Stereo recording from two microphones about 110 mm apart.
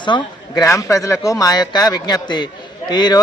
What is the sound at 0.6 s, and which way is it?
Speech, 30° left (ahead or behind).